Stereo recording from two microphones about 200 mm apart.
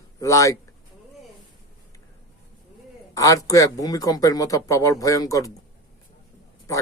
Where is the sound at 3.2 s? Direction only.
15° left (ahead or behind).